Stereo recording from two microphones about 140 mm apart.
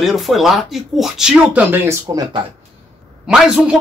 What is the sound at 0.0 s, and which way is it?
Speech, centre (ahead or behind).